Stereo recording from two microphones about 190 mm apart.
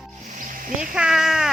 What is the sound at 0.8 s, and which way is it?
Speech, 5° right (ahead or behind).